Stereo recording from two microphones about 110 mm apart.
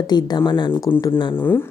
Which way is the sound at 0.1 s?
40° left (ahead or behind).